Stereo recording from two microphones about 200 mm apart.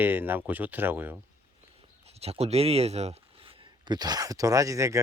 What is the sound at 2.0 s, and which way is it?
Speech, 30° right (ahead or behind).